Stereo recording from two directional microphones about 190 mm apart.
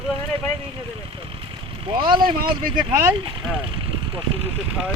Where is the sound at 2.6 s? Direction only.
45° right (ahead or behind).